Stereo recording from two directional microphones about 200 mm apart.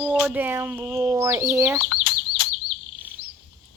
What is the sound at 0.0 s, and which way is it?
Speech, 5° right (ahead or behind).